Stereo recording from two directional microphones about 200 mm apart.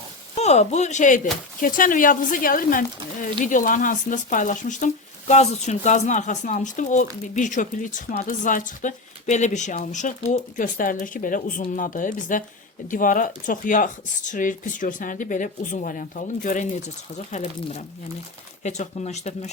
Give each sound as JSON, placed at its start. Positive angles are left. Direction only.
{"t": 0.3, "sound": "speech", "side_deg": 35}